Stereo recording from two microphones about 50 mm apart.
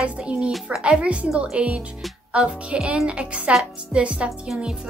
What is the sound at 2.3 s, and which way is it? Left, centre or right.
Speech, right.